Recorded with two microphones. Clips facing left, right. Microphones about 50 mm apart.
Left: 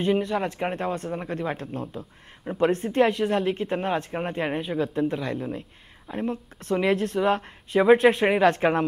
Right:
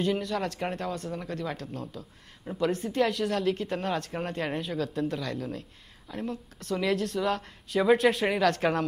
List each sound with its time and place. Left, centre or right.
0.0 s speech: left